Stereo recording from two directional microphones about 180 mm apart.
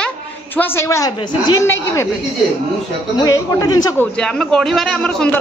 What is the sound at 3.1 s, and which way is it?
A man's voice, 20° left (ahead or behind).